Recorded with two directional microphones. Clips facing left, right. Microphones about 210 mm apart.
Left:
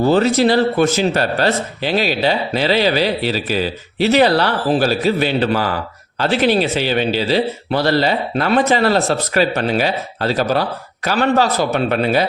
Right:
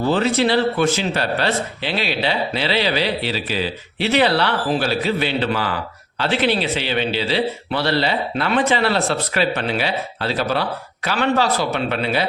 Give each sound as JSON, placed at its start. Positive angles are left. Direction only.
{"t": 0.0, "sound": "speech", "side_deg": 40}